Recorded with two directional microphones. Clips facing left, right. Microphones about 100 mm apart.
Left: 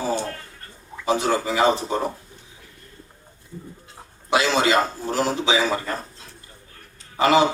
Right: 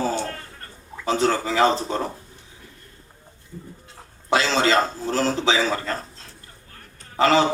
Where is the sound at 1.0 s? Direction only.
15° left (ahead or behind).